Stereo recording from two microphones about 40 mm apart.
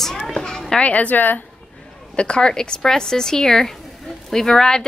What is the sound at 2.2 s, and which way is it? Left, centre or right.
Speech, left.